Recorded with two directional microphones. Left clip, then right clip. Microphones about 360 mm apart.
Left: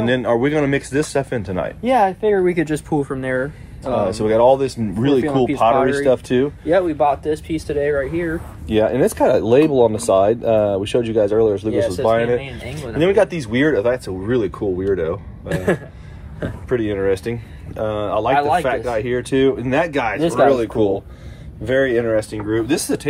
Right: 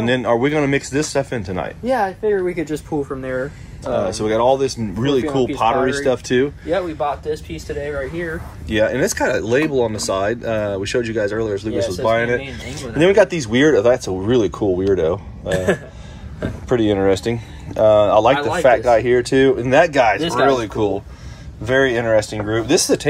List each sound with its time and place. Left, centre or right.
0.0 s speech: centre
1.9 s speech: left
4.0 s speech: centre
6.7 s speech: left
8.6 s speech: centre
15.5 s speech: left
16.6 s speech: centre